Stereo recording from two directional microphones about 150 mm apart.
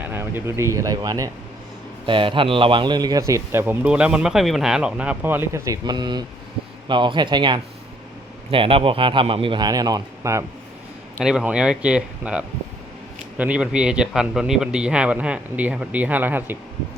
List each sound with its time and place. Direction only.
0.0 s speech: 15° right (ahead or behind)
2.0 s a man's voice: 35° right (ahead or behind)
11.2 s a man's voice: 5° right (ahead or behind)